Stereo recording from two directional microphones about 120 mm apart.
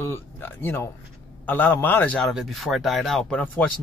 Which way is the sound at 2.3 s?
Centre (ahead or behind).